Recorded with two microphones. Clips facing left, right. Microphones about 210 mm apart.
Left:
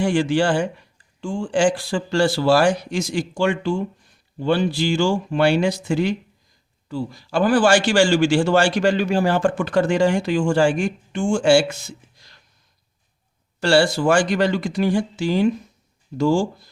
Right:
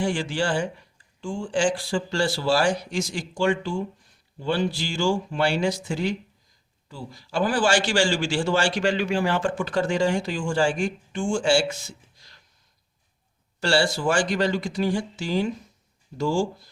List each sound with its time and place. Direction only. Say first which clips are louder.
0.0 s a man's voice: left 7 dB; 60° left (ahead or behind); by 9.5 s 40° left (ahead or behind)
9.6 s speech: left 5 dB; 60° left (ahead or behind)
13.6 s speech: left 6 dB; 55° left (ahead or behind)